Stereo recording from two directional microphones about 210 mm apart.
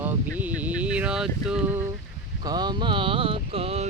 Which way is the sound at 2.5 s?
20° right (ahead or behind).